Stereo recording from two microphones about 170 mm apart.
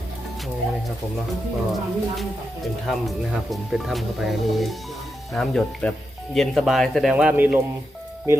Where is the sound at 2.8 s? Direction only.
Centre (ahead or behind).